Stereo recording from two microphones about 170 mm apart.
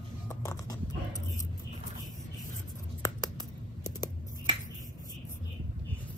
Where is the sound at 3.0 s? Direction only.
20° left (ahead or behind).